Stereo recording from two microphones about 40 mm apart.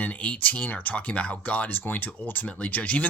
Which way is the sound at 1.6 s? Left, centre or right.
Left.